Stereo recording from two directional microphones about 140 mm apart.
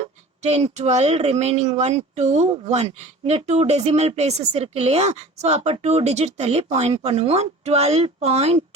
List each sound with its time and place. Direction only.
0.4 s speech: 55° right (ahead or behind)